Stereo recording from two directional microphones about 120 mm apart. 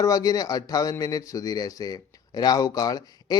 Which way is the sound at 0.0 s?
30° left (ahead or behind).